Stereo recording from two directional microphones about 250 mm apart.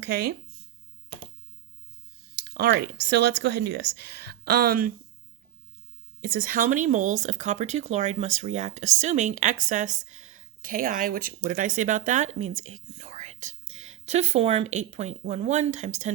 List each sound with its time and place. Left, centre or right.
0.0 s speech: right
2.3 s speech: right
6.2 s speech: right